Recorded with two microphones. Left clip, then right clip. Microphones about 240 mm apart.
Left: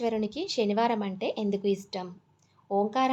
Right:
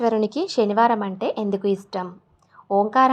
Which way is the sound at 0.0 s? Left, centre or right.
Right.